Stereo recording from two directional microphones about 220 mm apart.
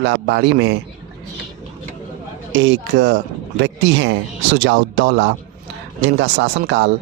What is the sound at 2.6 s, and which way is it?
A man's voice, 55° right (ahead or behind).